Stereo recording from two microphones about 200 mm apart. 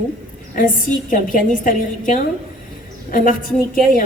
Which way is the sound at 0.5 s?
40° left (ahead or behind).